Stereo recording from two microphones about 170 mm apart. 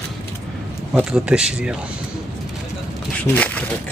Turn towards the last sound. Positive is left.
turn(degrees=10)  # may be behind; listen again after turning